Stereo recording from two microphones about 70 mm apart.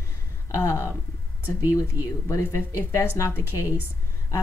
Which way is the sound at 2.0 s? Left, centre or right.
Left.